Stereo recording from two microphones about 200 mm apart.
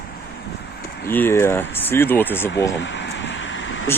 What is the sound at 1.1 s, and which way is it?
Speech, 10° left (ahead or behind).